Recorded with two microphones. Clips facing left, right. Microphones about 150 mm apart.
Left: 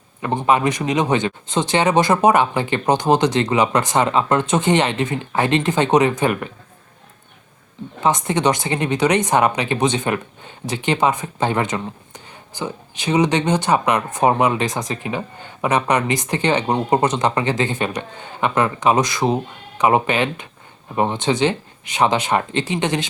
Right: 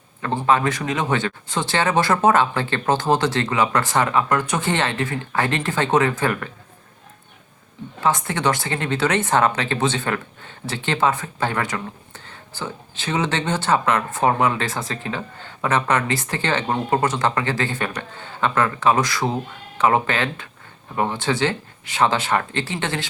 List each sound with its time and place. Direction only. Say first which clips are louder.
0.2 s speech: left 2 dB; 15° left (ahead or behind)
8.0 s speech: left 3 dB; 20° left (ahead or behind)